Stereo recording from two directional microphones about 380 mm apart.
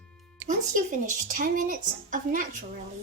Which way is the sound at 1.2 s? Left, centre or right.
Centre.